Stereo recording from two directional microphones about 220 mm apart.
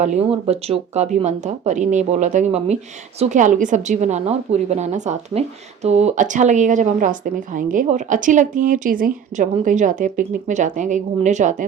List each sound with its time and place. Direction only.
0.0 s a woman's voice: 30° right (ahead or behind)